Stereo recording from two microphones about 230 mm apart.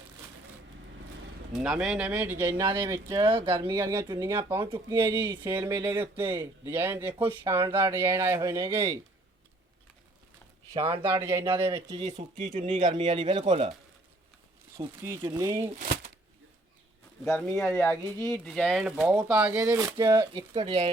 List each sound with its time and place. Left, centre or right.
1.5 s speech: centre
10.8 s speech: right
11.2 s speech: centre
14.8 s speech: centre
15.7 s shuffling cards: right
17.2 s speech: centre; by 20.9 s right